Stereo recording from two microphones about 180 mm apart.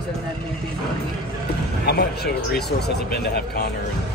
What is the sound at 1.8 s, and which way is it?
Speech, 65° left (ahead or behind).